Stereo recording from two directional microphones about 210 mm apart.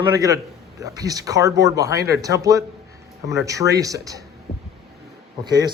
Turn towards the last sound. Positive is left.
turn(degrees=-20)  # may be behind; listen again after turning